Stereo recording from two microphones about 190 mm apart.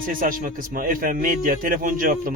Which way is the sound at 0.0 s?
45° right (ahead or behind).